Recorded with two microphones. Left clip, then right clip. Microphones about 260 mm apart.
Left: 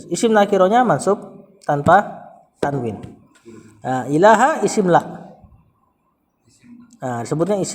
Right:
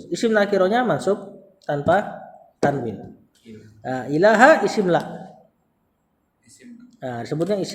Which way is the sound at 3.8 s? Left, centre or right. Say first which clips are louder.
Left 4 dB; left.